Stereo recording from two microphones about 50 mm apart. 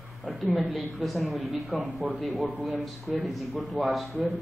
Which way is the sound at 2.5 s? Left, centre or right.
Right.